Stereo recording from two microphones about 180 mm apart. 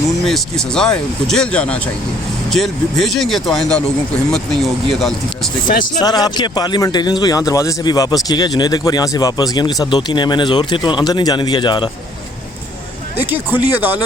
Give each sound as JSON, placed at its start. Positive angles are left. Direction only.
{"t": 0.3, "sound": "speech", "side_deg": 0}
{"t": 6.0, "sound": "speech", "side_deg": 20}
{"t": 13.7, "sound": "speech", "side_deg": -10}